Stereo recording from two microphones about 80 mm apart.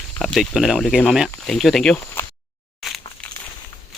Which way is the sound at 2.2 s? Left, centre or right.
Left.